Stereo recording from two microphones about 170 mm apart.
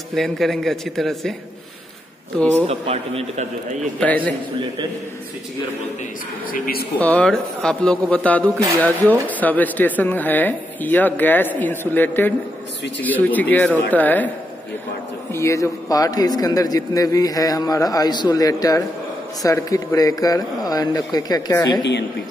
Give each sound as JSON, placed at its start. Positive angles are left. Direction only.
{"t": 0.1, "sound": "a man's voice", "side_deg": 0}
{"t": 2.6, "sound": "a man's voice", "side_deg": -35}
{"t": 4.0, "sound": "speech", "side_deg": 10}
{"t": 6.5, "sound": "a man's voice", "side_deg": 60}
{"t": 7.0, "sound": "speech", "side_deg": 5}
{"t": 15.3, "sound": "a man's voice", "side_deg": 15}